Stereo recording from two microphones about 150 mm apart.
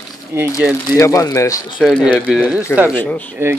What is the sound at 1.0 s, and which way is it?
Speech, 20° left (ahead or behind).